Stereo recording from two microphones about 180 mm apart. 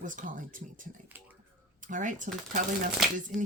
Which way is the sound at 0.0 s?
45° right (ahead or behind).